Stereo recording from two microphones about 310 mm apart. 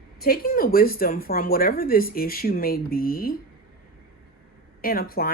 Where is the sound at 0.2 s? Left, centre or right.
Left.